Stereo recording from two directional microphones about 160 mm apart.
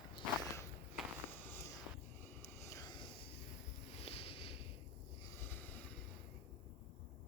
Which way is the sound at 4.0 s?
40° left (ahead or behind).